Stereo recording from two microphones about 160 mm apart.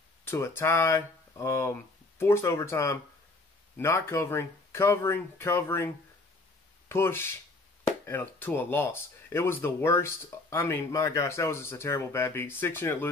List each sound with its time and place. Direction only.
0.3 s speech: 15° left (ahead or behind)
6.9 s speech: 15° left (ahead or behind)